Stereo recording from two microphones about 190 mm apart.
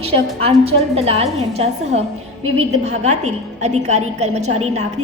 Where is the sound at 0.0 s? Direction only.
30° right (ahead or behind).